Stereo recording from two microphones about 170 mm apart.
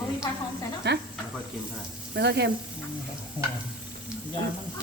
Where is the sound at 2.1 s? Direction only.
80° right.